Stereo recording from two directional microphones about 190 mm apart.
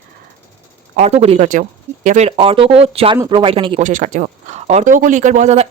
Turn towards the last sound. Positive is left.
turn(degrees=-35)  # may be behind; listen again after turning